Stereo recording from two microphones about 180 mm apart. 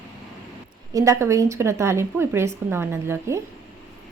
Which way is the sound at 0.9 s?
15° right (ahead or behind).